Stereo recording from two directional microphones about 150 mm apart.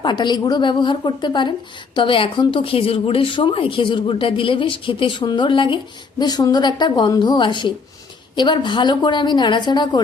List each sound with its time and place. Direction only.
0.0 s a woman's voice: 30° left (ahead or behind)